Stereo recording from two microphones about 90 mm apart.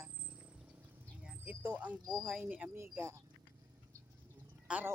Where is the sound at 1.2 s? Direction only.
15° right (ahead or behind).